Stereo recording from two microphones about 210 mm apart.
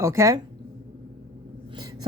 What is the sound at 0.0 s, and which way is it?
Speech, 15° right (ahead or behind).